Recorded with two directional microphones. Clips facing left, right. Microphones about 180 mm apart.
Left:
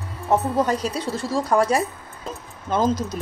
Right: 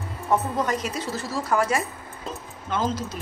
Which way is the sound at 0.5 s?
35° left (ahead or behind).